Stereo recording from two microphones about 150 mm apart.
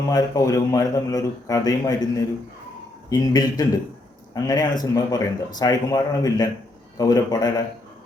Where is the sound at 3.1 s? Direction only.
25° left (ahead or behind).